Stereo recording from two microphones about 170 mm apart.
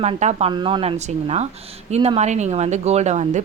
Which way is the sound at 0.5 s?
30° right (ahead or behind).